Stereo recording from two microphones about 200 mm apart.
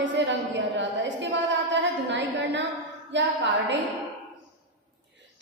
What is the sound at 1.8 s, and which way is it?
A woman's voice, 60° right (ahead or behind).